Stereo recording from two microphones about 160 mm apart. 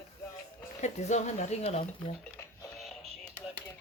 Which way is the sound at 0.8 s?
45° left (ahead or behind).